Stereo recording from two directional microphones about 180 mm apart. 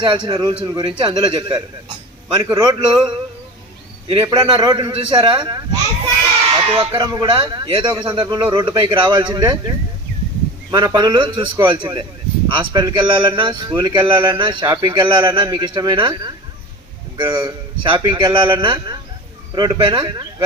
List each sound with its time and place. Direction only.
0.0 s a man's voice: 25° right (ahead or behind)
6.7 s a man's voice: 25° right (ahead or behind)